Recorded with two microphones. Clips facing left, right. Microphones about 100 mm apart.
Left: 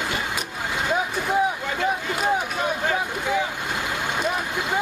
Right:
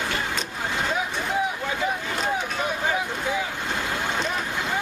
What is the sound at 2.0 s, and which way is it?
Vehicle, 10° left (ahead or behind).